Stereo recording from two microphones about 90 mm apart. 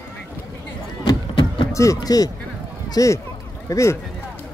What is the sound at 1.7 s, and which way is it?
Speech, 35° left (ahead or behind).